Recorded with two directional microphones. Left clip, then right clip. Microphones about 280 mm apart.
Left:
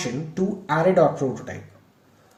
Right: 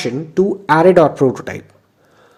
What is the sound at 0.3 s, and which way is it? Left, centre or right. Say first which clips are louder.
Speech: right 11 dB; right.